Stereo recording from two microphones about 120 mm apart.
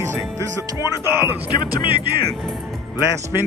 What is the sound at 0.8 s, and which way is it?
Speech, 30° left (ahead or behind).